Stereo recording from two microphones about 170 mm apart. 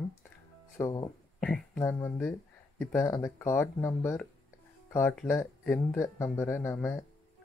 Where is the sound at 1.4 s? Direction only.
5° left (ahead or behind).